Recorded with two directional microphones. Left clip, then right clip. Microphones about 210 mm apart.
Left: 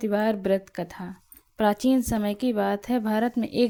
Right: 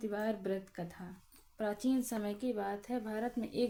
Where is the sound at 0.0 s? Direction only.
40° left (ahead or behind).